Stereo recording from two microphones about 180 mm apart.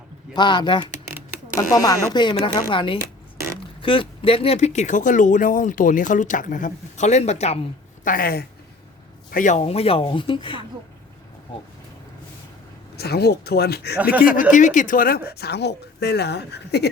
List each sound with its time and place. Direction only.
0.3 s speech: 25° left (ahead or behind)
8.0 s speech: 50° left (ahead or behind)
9.3 s speech: 45° left (ahead or behind); by 10.6 s 30° left (ahead or behind)
13.0 s speech: 65° left (ahead or behind)
14.0 s speech: 10° right (ahead or behind)
14.5 s speech: 45° left (ahead or behind)
15.3 s a woman's voice: 65° left (ahead or behind)